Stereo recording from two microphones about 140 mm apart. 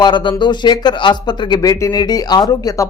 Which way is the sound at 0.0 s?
35° left (ahead or behind).